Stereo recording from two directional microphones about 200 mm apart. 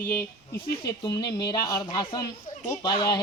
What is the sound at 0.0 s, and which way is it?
Speech, 10° left (ahead or behind).